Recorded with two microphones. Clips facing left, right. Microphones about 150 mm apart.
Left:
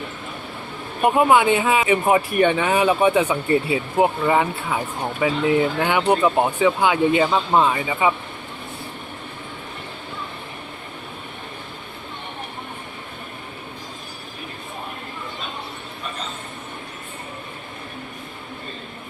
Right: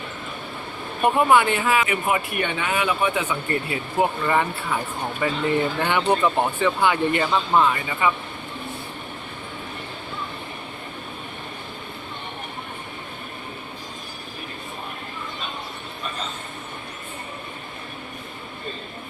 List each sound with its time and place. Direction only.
1.0 s speech: 15° left (ahead or behind); by 3.3 s 30° left (ahead or behind)
3.9 s speech: 15° left (ahead or behind)